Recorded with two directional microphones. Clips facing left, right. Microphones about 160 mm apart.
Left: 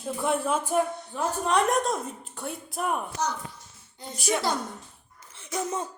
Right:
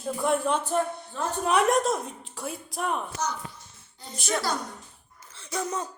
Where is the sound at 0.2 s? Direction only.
Centre (ahead or behind).